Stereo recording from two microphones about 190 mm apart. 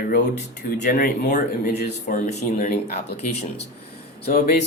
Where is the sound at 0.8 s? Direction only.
50° left (ahead or behind).